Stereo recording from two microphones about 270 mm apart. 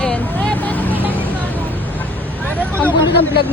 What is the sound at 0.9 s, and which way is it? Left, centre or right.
Vehicle, centre.